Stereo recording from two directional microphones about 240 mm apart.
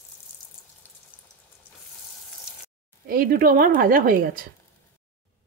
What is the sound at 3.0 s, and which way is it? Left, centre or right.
A woman's voice, right.